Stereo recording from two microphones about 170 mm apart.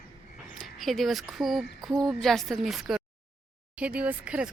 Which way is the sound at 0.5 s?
Centre (ahead or behind).